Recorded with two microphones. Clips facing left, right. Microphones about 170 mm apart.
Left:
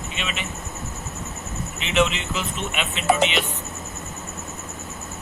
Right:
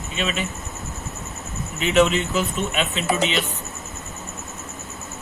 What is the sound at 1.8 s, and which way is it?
Speech, 40° right (ahead or behind).